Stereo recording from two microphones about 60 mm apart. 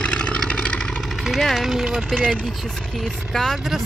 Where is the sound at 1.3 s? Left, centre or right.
Centre.